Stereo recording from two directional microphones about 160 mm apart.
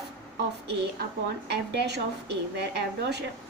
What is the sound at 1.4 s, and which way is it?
A woman's voice, 90° right.